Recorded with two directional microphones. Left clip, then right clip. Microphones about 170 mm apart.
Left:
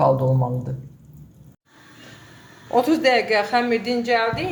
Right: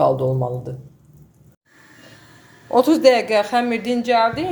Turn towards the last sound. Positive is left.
turn(degrees=-40)  # may be behind; listen again after turning